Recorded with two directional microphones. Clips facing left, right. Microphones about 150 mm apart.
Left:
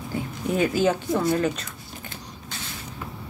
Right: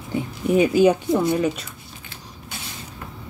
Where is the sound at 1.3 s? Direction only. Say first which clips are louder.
Right 2 dB; 10° right (ahead or behind).